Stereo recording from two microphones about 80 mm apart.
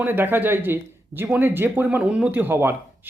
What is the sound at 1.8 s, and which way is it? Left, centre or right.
Speech, centre.